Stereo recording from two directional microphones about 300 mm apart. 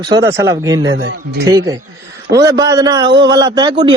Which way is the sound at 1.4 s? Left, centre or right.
Centre.